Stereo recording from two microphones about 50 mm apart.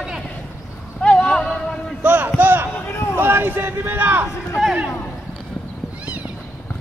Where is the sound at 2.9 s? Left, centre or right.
Left.